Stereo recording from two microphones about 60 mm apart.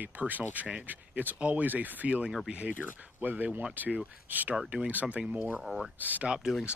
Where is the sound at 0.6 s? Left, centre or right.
Centre.